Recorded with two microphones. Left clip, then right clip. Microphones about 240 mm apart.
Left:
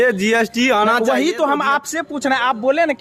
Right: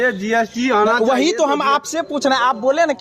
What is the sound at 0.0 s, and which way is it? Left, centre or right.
Speech, left.